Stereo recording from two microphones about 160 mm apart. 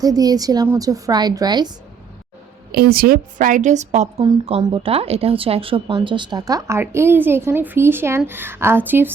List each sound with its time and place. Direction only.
0.0 s speech: 25° right (ahead or behind)
2.7 s a woman's voice: 70° right (ahead or behind); by 4.1 s 45° right (ahead or behind)
4.6 s speech: 35° right (ahead or behind); by 9.1 s 10° right (ahead or behind)